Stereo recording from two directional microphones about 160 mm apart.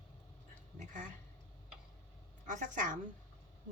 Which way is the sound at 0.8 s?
55° right (ahead or behind).